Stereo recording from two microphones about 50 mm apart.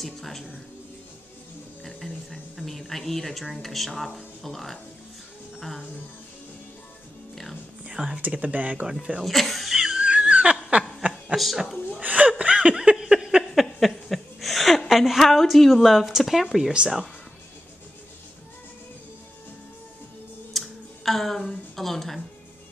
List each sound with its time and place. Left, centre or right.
0.0 s speech: centre
1.8 s a sound: centre
2.5 s speech: centre
7.9 s speech: centre
8.2 s speech: right
9.2 s speech: centre
9.9 s laughter: right
11.0 s snicker: right
12.0 s chuckle: right
12.9 s a sound: centre
13.6 s a sound: centre
16.7 s speech: right
20.5 s a sound: centre
21.5 s speech: centre